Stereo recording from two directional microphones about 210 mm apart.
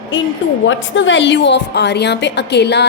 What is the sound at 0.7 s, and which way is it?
A woman's voice, 65° left (ahead or behind).